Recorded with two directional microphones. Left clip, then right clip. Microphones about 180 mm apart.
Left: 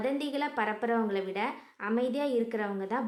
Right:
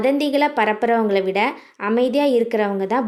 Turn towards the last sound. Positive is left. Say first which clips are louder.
# right 13 dB
turn(degrees=-30)  # may be behind; listen again after turning